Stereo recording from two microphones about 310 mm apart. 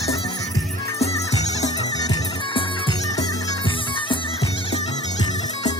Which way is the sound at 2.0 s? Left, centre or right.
Centre.